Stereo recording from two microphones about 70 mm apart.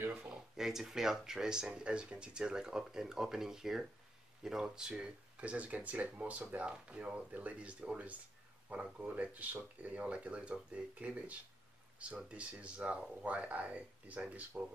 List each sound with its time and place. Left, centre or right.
0.3 s speech: centre
4.9 s speech: centre